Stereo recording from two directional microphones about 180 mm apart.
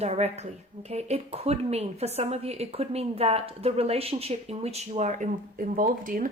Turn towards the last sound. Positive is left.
turn(degrees=-50)  # may be behind; listen again after turning